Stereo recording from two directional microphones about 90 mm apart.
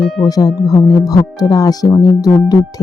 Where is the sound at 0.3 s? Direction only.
45° left (ahead or behind).